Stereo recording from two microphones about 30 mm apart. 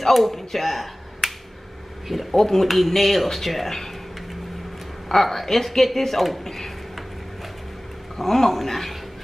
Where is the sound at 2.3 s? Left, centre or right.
Centre.